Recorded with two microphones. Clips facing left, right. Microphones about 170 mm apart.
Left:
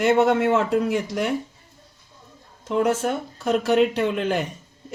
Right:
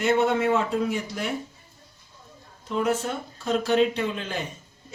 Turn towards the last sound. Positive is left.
turn(degrees=65)  # may be behind; listen again after turning